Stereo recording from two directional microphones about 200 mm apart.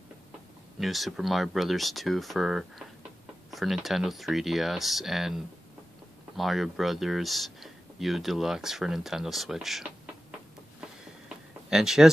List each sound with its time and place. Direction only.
0.7 s speech: centre (ahead or behind)
11.7 s speech: centre (ahead or behind)